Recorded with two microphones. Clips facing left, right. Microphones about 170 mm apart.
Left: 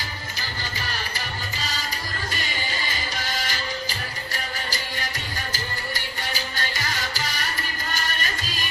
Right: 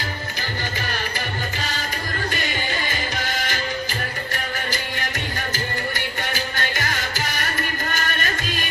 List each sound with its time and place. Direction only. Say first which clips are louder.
2.3 s music: right 5 dB; 50° right (ahead or behind)
6.3 s music: right 4 dB; 50° right (ahead or behind)